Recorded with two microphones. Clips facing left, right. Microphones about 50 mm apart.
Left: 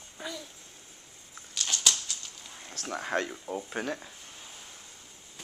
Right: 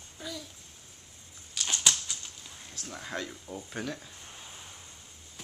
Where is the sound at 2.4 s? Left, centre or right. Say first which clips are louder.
Left 2 dB; centre.